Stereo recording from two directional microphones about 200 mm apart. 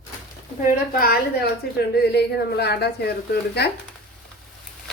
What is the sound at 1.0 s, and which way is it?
A woman's voice, 50° left (ahead or behind).